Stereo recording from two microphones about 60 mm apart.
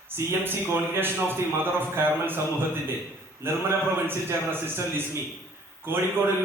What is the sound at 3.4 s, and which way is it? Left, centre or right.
A man's voice, right.